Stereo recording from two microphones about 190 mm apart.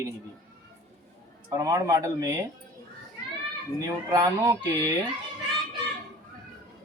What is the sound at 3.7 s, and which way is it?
Speech, 20° right (ahead or behind).